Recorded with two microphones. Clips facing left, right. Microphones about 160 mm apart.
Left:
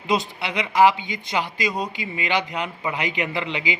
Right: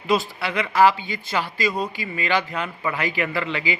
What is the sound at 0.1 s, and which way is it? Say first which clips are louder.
Speech: right 2 dB; 20° left (ahead or behind).